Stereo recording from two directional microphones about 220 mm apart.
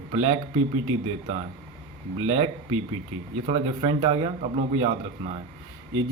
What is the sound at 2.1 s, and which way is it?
A man's voice, 25° right (ahead or behind).